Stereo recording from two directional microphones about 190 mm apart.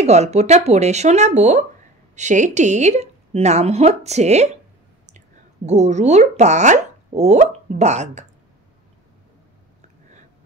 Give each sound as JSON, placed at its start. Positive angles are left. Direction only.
{"t": 0.0, "sound": "speech", "side_deg": -35}
{"t": 5.7, "sound": "speech", "side_deg": -35}